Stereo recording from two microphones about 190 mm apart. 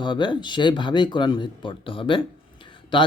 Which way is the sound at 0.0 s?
25° left (ahead or behind).